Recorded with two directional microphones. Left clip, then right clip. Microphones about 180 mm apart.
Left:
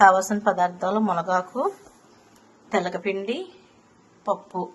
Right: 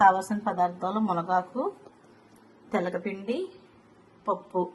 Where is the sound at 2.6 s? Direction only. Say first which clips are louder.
Left 5 dB; 25° left (ahead or behind).